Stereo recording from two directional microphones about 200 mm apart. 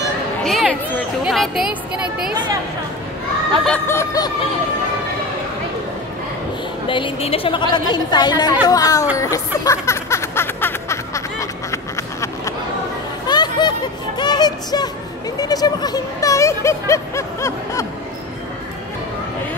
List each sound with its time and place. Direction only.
0.4 s speech: centre (ahead or behind)
3.6 s snicker: 10° left (ahead or behind)
6.9 s a woman's voice: 25° left (ahead or behind)
8.6 s snicker: 15° left (ahead or behind)
9.1 s a sound: 15° left (ahead or behind)
15.3 s speech: 20° left (ahead or behind)